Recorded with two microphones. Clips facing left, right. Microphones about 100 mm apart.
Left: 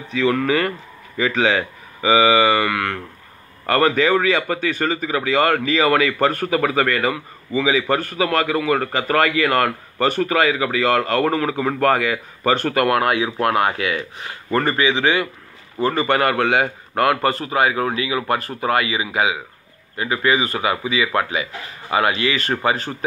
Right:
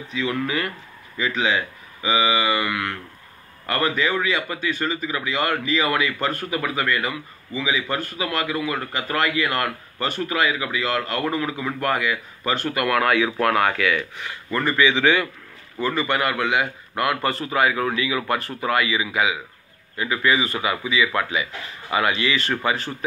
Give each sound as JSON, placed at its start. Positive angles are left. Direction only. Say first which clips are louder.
{"t": 0.1, "sound": "speech", "louder": "left 7 dB", "side_deg": 55}
{"t": 8.6, "sound": "speech", "louder": "left 7 dB", "side_deg": 65}
{"t": 12.1, "sound": "speech", "louder": "left 5 dB", "side_deg": 60}
{"t": 12.7, "sound": "speech", "louder": "left 3 dB", "side_deg": 30}
{"t": 14.5, "sound": "a man's voice", "louder": "left 2 dB", "side_deg": 40}
{"t": 15.8, "sound": "a man's voice", "louder": "left 5 dB", "side_deg": 45}